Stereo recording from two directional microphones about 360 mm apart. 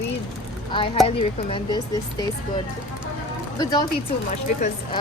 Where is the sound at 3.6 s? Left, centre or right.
Centre.